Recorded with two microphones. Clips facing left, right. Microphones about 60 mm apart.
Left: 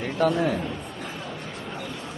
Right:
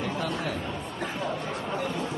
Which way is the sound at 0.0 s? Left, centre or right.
Left.